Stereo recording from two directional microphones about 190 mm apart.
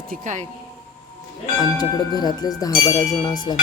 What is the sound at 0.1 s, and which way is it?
Speech, 40° right (ahead or behind).